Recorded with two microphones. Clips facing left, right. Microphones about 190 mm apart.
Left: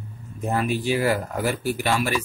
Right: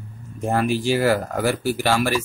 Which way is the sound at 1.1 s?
90° right.